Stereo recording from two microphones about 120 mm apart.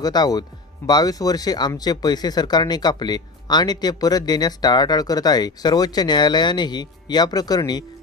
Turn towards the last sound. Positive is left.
turn(degrees=35)  # may be behind; listen again after turning